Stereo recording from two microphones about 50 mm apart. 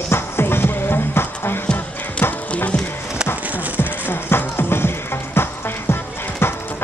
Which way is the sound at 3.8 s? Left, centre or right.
Left.